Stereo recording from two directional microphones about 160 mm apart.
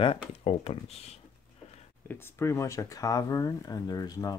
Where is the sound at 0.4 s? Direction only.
40° left (ahead or behind).